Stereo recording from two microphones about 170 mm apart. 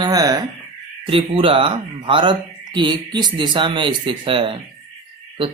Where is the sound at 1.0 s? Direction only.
35° right (ahead or behind).